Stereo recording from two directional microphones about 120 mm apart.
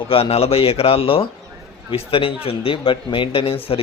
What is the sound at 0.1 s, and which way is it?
A man's voice, 55° left (ahead or behind).